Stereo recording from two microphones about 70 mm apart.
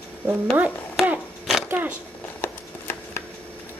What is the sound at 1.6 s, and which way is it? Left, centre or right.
Speech, right.